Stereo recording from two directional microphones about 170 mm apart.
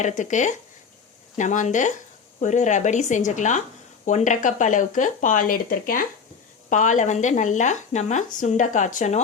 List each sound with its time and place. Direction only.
0.0 s speech: 45° left (ahead or behind)